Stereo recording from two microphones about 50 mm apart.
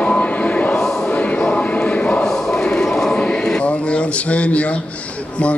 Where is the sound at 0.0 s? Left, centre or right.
Left.